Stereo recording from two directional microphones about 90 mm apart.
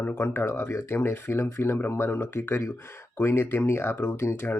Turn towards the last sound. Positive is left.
turn(degrees=25)  # may be behind; listen again after turning